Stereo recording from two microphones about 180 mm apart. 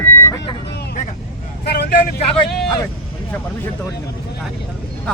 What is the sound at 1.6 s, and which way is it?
Vehicle, 65° left (ahead or behind).